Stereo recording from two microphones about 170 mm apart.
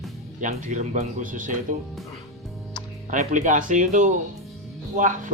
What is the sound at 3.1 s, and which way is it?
Speech, 45° right (ahead or behind).